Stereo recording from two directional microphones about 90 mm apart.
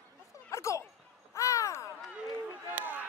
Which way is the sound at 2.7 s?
20° right (ahead or behind).